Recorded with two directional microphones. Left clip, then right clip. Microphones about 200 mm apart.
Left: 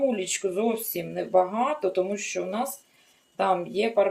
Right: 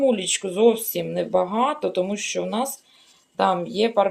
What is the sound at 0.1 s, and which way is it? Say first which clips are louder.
Speech: right 4 dB; 45° right (ahead or behind).